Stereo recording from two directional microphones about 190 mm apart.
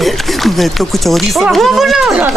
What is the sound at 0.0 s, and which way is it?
Speech, centre (ahead or behind).